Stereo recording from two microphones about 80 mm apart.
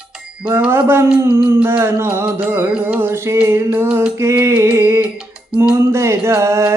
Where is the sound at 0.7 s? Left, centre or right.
Right.